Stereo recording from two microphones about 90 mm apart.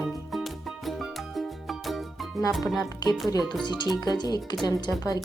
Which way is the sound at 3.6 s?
55° left (ahead or behind).